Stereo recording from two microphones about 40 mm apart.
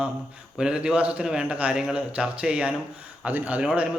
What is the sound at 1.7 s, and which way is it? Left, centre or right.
A man's voice, right.